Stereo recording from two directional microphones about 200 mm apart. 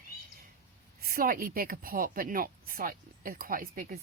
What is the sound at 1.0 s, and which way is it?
Speech, 45° right (ahead or behind).